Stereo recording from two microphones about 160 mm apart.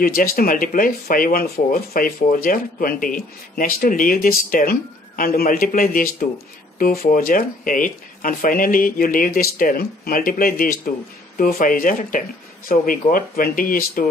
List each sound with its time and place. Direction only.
0.0 s speech: 65° left (ahead or behind)